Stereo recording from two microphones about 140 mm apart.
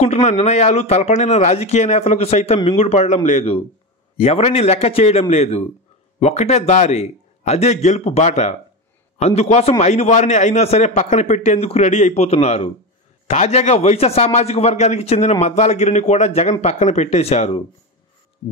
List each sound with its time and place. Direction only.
0.0 s a man's voice: 55° left (ahead or behind)